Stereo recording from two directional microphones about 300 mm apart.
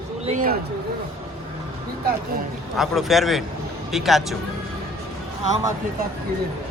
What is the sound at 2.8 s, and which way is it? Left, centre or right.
A man's voice, centre.